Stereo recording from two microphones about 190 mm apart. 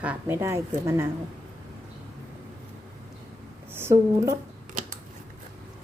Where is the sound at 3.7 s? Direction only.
15° right (ahead or behind).